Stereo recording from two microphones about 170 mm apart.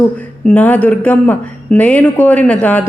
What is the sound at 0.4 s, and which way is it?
A woman's voice, 10° left (ahead or behind).